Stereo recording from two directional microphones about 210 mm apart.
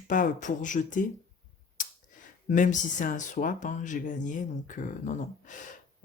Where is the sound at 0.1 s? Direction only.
35° left (ahead or behind).